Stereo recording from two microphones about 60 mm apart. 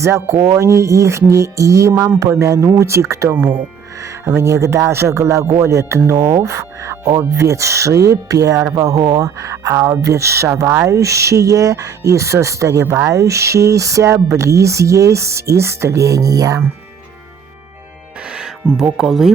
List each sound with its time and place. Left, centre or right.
0.0 s speech: right
6.9 s speech: right
7.4 s speech: right
18.3 s speech: centre